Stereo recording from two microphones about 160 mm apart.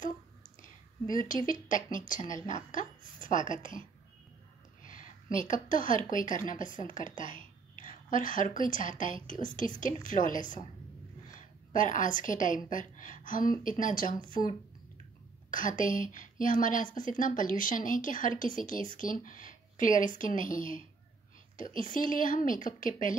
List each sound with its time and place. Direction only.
1.5 s a woman's voice: 55° left (ahead or behind)
4.8 s a sound: 55° left (ahead or behind)
5.5 s a woman's voice: 55° left (ahead or behind)